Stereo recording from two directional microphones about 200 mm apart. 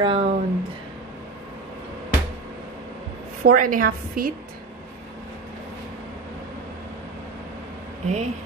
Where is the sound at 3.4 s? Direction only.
45° right (ahead or behind).